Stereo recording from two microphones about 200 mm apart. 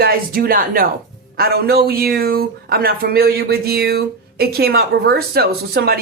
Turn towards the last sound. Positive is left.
turn(degrees=-50)  # may be behind; listen again after turning